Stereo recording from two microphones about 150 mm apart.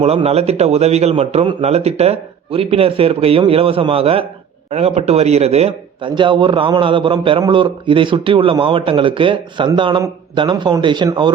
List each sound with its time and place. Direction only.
0.0 s a man's voice: 40° right (ahead or behind)